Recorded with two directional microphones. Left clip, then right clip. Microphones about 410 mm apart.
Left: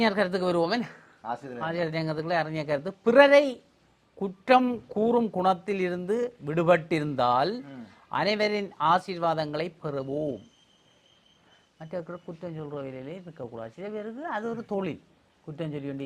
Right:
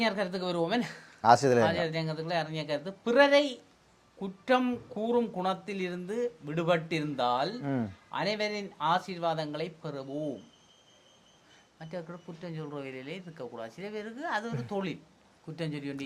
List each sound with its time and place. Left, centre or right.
0.0 s a man's voice: left
0.8 s speech: centre
1.2 s speech: right
1.6 s a man's voice: left
11.8 s speech: left